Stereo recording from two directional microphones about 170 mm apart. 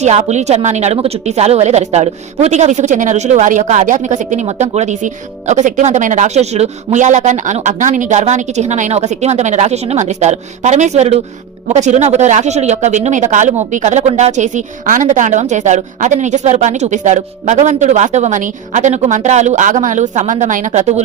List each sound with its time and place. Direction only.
0.0 s speech: 40° right (ahead or behind)